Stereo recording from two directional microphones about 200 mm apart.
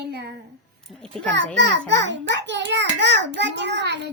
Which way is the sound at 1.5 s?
60° right (ahead or behind).